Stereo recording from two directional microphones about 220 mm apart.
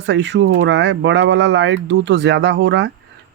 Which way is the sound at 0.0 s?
50° right (ahead or behind).